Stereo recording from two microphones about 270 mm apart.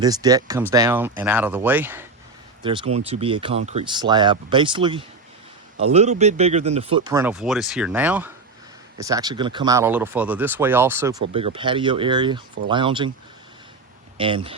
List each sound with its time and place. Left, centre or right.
0.0 s speech: centre
2.6 s speech: centre
11.3 s speech: right
14.2 s speech: centre